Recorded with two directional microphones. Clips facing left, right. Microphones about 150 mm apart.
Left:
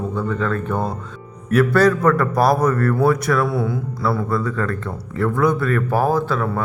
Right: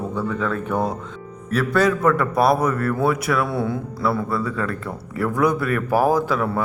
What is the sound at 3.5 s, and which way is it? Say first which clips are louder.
Speech: left 1 dB; 25° right (ahead or behind).